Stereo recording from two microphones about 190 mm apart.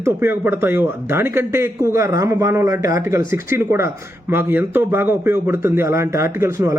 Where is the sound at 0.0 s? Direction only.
10° right (ahead or behind).